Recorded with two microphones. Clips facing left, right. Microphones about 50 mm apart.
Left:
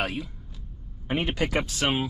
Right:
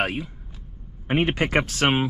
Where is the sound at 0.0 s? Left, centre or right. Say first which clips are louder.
Right 4 dB; right.